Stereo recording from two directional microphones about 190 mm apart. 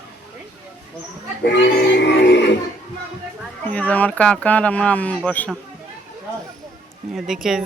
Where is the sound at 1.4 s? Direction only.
65° left (ahead or behind).